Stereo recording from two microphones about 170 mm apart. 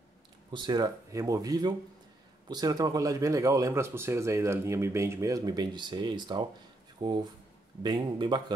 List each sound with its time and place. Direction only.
0.5 s speech: 25° right (ahead or behind)